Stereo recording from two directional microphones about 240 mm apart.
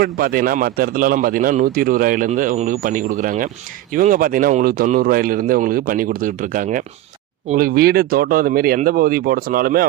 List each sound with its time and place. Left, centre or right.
0.0 s speech: right